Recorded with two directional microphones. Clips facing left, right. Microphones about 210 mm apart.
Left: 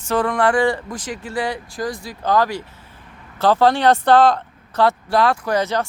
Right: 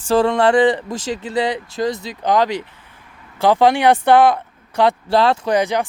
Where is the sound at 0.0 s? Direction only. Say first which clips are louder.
Right 4 dB; 30° right (ahead or behind).